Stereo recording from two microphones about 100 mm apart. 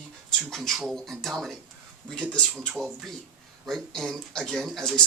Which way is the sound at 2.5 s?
15° right (ahead or behind).